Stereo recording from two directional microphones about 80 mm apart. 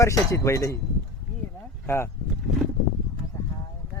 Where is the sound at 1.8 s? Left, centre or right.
Left.